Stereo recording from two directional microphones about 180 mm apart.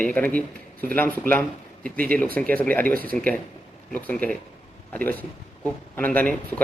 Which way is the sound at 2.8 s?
55° right (ahead or behind).